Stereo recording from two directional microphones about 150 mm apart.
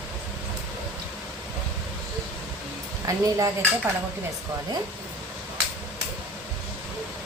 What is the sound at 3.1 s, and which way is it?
Speech, 20° right (ahead or behind).